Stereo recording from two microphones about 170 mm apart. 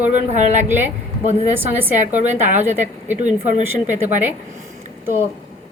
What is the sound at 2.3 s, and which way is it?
Speech, 45° right (ahead or behind).